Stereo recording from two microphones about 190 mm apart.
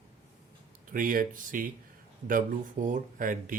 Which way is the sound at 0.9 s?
45° right (ahead or behind).